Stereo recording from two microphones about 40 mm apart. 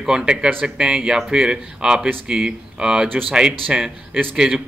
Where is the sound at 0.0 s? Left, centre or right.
Centre.